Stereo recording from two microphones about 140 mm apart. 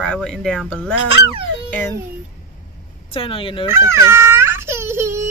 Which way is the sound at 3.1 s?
40° left (ahead or behind).